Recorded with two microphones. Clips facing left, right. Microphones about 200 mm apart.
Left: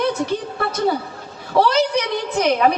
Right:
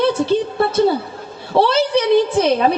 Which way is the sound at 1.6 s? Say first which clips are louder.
Right 2 dB; 30° right (ahead or behind).